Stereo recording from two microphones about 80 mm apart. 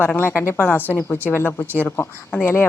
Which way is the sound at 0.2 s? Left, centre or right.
Left.